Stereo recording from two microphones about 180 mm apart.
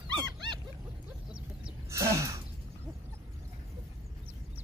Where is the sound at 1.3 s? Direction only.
5° right (ahead or behind).